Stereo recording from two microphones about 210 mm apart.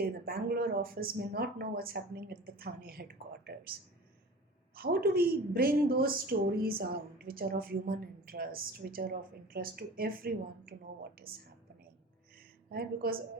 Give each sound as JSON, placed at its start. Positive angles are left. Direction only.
{"t": 0.0, "sound": "a woman's voice", "side_deg": -45}
{"t": 12.7, "sound": "a woman's voice", "side_deg": -45}